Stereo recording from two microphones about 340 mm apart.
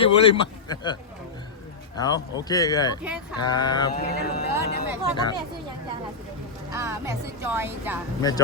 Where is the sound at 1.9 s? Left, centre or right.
Centre.